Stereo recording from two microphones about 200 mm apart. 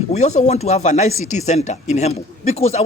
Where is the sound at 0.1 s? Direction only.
35° left (ahead or behind).